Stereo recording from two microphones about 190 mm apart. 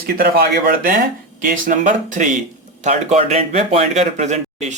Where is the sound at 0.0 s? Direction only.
50° right (ahead or behind).